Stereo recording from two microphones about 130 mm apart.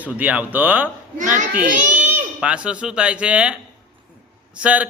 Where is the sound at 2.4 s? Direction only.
10° right (ahead or behind).